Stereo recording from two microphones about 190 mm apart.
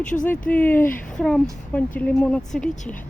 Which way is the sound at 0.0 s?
40° left (ahead or behind).